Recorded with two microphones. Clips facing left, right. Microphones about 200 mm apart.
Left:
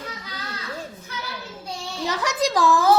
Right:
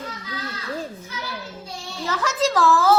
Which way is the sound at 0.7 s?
15° right (ahead or behind).